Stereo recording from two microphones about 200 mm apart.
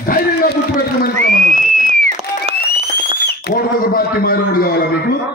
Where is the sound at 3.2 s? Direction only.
55° left (ahead or behind).